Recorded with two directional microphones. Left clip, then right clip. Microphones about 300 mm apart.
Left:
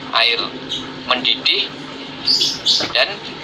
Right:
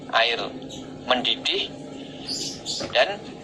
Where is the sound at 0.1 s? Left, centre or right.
Right.